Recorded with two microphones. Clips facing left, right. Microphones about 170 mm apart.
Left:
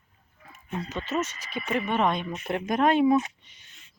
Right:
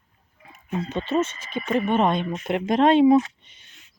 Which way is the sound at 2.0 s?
25° right (ahead or behind).